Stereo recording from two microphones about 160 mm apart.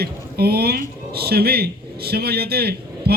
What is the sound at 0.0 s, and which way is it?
A man's voice, 75° right (ahead or behind).